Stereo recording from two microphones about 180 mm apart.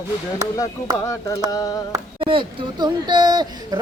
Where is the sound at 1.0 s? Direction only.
15° left (ahead or behind).